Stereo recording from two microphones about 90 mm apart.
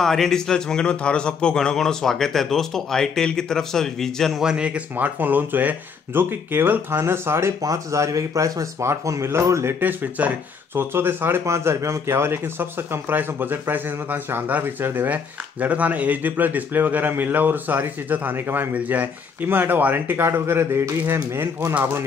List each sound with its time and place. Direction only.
0.0 s a man's voice: 5° left (ahead or behind)
4.4 s speech: 10° right (ahead or behind); by 21.6 s 25° right (ahead or behind)